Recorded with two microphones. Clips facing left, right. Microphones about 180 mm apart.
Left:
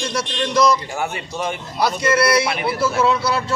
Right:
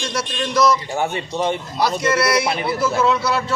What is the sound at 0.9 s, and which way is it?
Speech, 30° right (ahead or behind).